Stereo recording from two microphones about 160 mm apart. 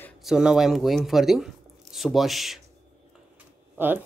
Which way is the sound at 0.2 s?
5° right (ahead or behind).